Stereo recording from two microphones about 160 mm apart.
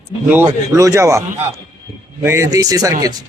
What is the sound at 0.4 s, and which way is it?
Speech, 20° right (ahead or behind).